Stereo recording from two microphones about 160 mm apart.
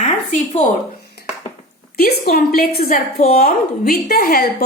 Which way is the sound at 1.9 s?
70° left (ahead or behind).